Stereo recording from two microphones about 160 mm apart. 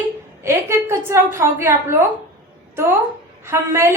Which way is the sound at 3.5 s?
15° right (ahead or behind).